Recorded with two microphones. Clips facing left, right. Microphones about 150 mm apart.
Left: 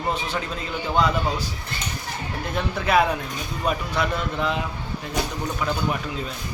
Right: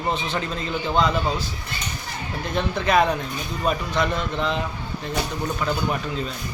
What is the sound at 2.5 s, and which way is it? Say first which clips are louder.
Speech: right 1 dB; 5° left (ahead or behind).